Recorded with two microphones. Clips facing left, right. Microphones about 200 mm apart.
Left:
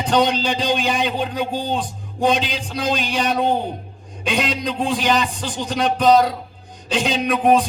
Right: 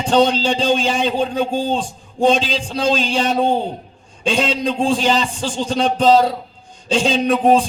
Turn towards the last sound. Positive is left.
turn(degrees=-30)  # may be behind; listen again after turning